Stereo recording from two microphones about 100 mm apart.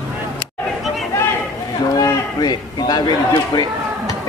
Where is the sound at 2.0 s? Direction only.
40° left (ahead or behind).